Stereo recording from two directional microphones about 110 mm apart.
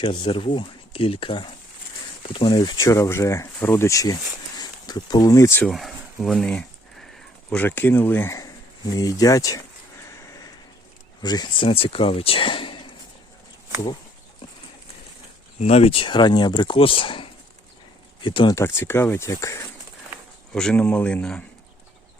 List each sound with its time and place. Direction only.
0.1 s speech: 50° left (ahead or behind)
2.7 s speech: 30° left (ahead or behind)
5.6 s a sound: centre (ahead or behind)
7.6 s speech: 15° left (ahead or behind)
8.9 s speech: 30° left (ahead or behind)
11.2 s speech: 40° left (ahead or behind)
15.6 s speech: 65° left (ahead or behind); by 18.5 s 50° left (ahead or behind)
18.5 s speech: 25° left (ahead or behind)
20.5 s speech: 5° left (ahead or behind)